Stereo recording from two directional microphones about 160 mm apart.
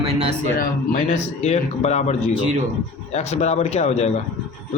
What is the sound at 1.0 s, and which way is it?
Speech, 45° left (ahead or behind).